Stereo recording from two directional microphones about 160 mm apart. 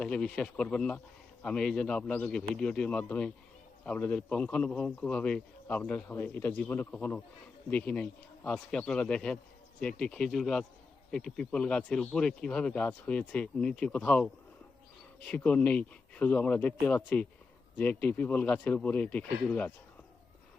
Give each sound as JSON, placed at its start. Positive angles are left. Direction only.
{"t": 0.0, "sound": "a man's voice", "side_deg": 5}